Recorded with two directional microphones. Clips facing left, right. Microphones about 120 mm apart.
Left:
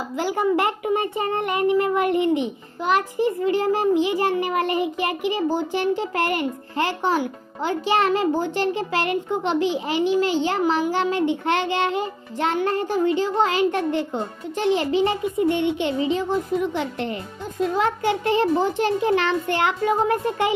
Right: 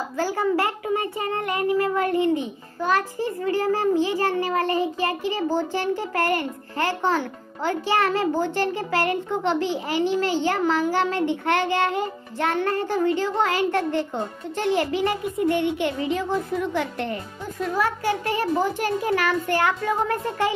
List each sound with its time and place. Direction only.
0.2 s a child's voice: 15° left (ahead or behind)